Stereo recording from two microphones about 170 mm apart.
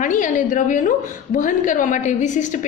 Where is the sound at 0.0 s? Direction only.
50° left (ahead or behind).